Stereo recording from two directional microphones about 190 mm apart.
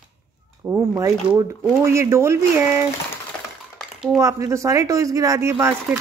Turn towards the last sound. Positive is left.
turn(degrees=-15)  # may be behind; listen again after turning